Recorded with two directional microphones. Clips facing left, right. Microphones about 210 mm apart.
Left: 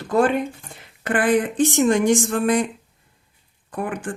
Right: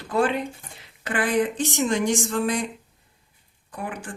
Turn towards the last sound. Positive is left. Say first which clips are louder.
# left 6 dB
turn(degrees=55)  # may be behind; listen again after turning